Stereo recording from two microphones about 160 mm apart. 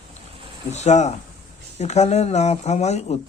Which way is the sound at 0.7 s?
45° left (ahead or behind).